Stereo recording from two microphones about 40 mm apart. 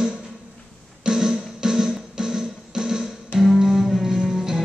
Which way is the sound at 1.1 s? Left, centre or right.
Centre.